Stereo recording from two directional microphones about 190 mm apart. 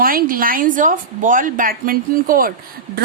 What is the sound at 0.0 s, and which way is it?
A woman's voice, 50° right (ahead or behind).